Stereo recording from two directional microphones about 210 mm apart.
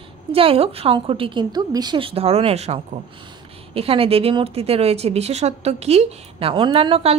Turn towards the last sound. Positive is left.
turn(degrees=-25)  # may be behind; listen again after turning